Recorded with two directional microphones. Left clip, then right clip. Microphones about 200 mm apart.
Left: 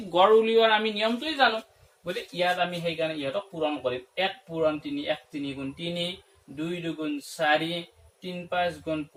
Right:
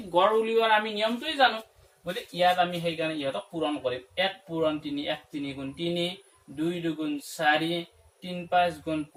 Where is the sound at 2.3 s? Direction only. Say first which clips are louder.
Right 3 dB; 10° left (ahead or behind).